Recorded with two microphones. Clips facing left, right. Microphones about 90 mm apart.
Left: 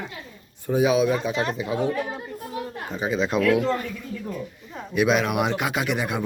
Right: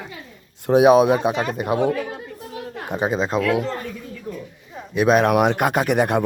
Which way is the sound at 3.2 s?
25° right (ahead or behind).